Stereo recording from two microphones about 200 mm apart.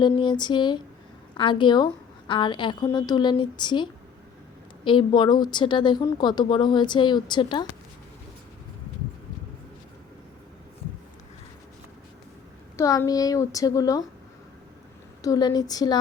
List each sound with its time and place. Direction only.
0.0 s speech: 25° left (ahead or behind)
12.7 s a woman's voice: 15° left (ahead or behind)
15.2 s speech: 20° left (ahead or behind)